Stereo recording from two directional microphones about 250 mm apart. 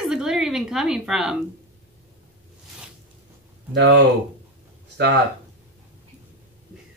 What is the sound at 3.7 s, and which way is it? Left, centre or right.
Speech, right.